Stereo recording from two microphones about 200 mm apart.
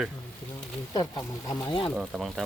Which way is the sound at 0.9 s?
20° left (ahead or behind).